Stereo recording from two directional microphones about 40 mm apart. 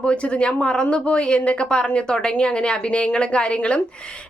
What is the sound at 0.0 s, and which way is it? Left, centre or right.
A woman's voice, left.